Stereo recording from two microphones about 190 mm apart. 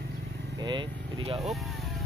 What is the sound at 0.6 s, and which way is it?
Speech, 25° right (ahead or behind).